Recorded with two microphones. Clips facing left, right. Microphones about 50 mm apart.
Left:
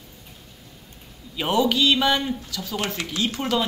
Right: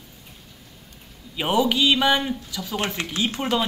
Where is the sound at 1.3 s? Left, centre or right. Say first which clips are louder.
Even; centre.